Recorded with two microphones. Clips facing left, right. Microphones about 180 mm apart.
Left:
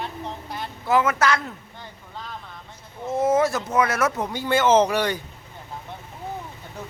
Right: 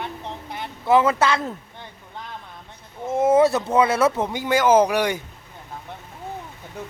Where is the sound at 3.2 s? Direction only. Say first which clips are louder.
Right 4 dB; 30° right (ahead or behind); by 5.2 s 15° right (ahead or behind).